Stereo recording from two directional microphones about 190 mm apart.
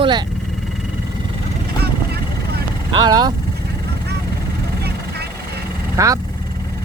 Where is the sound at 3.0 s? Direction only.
20° right (ahead or behind).